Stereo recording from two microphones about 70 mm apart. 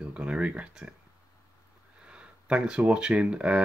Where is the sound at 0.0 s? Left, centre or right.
Centre.